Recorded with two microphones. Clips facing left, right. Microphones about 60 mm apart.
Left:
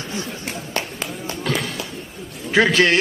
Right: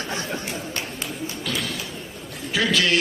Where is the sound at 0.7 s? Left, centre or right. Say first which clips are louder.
Left 3 dB; left.